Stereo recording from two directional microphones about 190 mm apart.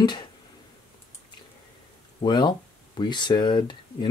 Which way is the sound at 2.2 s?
25° left (ahead or behind).